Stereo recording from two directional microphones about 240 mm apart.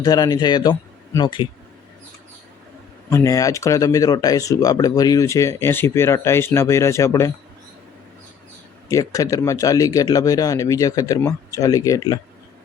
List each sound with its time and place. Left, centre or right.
0.0 s speech: centre
3.1 s speech: centre
8.9 s speech: centre